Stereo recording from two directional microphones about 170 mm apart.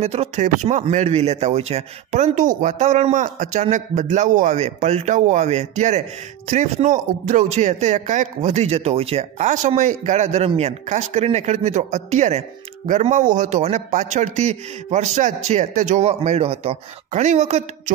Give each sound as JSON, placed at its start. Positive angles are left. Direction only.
{"t": 0.0, "sound": "speech", "side_deg": -40}